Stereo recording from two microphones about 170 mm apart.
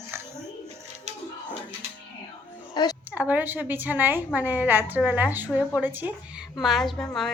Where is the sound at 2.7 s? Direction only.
25° left (ahead or behind).